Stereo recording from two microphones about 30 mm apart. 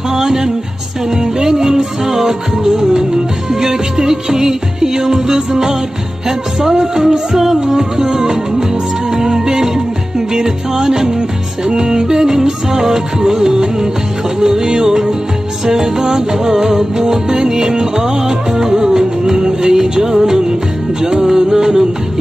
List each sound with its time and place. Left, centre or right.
0.1 s music: centre
14.4 s music of bollywood: right
15.6 s music: centre